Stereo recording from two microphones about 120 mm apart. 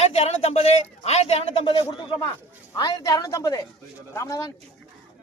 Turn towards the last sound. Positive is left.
turn(degrees=25)  # may be behind; listen again after turning